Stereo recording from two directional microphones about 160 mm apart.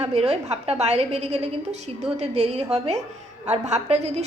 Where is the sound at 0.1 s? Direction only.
45° right (ahead or behind).